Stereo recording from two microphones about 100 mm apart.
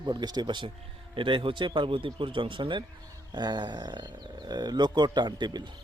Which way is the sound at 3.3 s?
45° right (ahead or behind).